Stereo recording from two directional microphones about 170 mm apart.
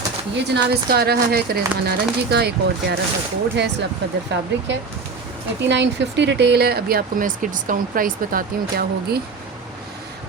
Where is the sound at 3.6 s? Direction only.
90° right.